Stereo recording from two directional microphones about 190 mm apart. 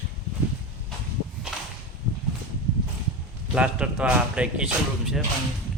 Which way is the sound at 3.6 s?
5° right (ahead or behind).